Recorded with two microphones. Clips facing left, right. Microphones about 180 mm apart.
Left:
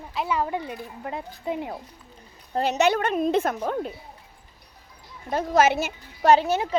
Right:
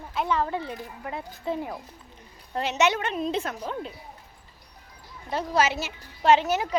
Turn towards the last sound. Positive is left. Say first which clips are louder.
# left 2 dB
turn(degrees=30)  # may be behind; listen again after turning